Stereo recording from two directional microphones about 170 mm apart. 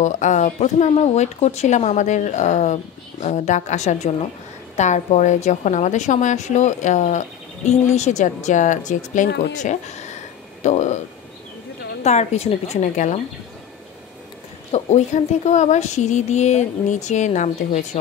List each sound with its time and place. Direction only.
0.0 s a woman's voice: 45° left (ahead or behind)
12.0 s a woman's voice: 40° left (ahead or behind)
14.7 s a woman's voice: 40° left (ahead or behind)